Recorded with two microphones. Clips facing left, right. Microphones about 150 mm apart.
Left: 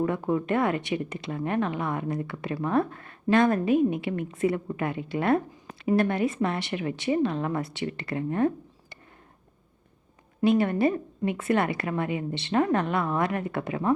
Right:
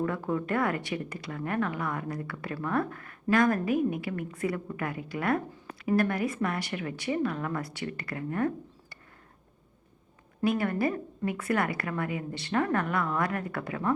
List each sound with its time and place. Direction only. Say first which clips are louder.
0.0 s speech: left 4 dB; 20° left (ahead or behind)
10.4 s speech: left 5 dB; 25° left (ahead or behind)